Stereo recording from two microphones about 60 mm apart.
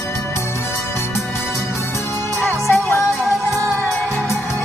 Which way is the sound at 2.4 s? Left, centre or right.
Left.